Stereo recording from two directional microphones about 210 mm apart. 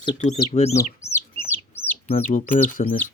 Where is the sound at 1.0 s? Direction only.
10° left (ahead or behind).